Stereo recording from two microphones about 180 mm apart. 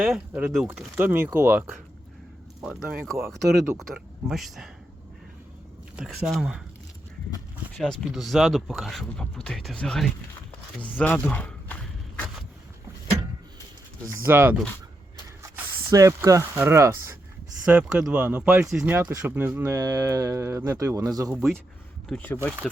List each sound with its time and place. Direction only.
0.0 s speech: 5° right (ahead or behind)
3.9 s speech: centre (ahead or behind)
6.0 s speech: 5° right (ahead or behind)
7.8 s speech: centre (ahead or behind)
10.8 s a sound: 10° left (ahead or behind)
14.1 s speech: 15° right (ahead or behind)
21.3 s speech: centre (ahead or behind)